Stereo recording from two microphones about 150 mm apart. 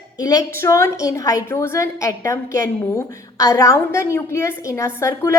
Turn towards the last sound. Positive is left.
turn(degrees=20)  # may be behind; listen again after turning